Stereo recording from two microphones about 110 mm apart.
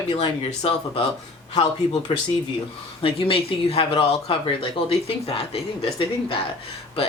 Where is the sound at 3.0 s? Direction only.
55° left (ahead or behind).